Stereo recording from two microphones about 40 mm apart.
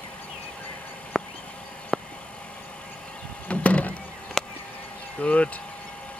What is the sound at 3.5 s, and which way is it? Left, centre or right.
Vehicle, left.